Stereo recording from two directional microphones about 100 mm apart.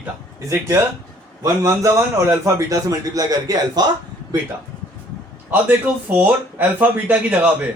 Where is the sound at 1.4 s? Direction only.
35° right (ahead or behind).